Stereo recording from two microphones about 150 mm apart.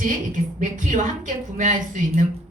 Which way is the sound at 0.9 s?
55° right (ahead or behind).